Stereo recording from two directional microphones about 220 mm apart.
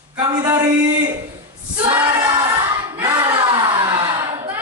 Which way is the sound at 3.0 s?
20° right (ahead or behind).